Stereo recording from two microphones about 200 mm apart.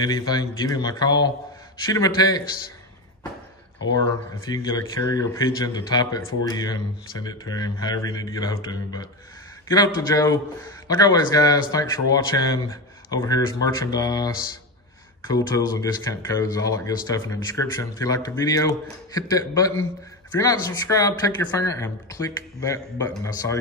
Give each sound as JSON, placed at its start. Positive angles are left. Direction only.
{"t": 0.0, "sound": "speech", "side_deg": 20}
{"t": 4.5, "sound": "speech", "side_deg": 20}
{"t": 15.3, "sound": "speech", "side_deg": 20}